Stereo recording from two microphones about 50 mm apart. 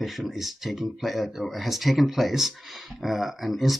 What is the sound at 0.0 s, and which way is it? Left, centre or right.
Speech, centre.